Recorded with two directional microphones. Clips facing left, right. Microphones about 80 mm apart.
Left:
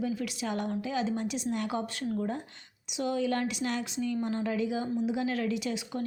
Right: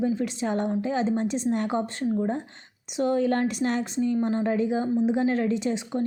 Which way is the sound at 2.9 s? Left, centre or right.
Right.